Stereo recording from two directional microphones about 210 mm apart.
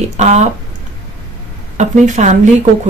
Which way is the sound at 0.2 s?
35° right (ahead or behind).